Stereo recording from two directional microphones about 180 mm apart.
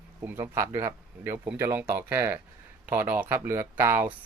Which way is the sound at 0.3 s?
15° right (ahead or behind).